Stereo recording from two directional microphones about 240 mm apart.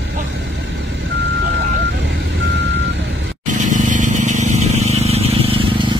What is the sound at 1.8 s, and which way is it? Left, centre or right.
Vehicle, right.